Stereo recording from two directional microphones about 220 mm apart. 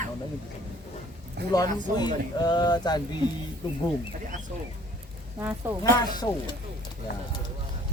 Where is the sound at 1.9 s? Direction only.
20° left (ahead or behind).